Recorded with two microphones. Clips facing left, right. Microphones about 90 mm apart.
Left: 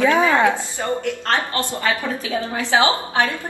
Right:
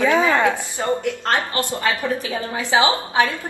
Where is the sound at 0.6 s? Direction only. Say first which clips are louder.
Right 1 dB; 20° right (ahead or behind).